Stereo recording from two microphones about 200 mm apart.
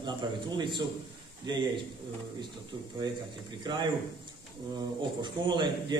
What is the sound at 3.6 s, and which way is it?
A man's voice, 20° right (ahead or behind).